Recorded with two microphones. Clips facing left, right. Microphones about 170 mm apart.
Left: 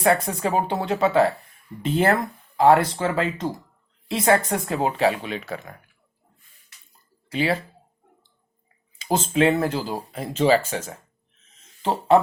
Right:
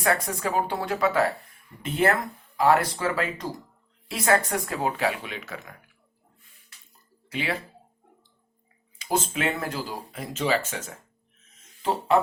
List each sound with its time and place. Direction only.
0.0 s speech: 25° left (ahead or behind)
7.3 s speech: 35° left (ahead or behind)
9.0 s speech: 25° left (ahead or behind)